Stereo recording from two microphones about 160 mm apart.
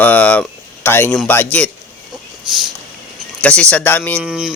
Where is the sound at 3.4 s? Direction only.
5° left (ahead or behind).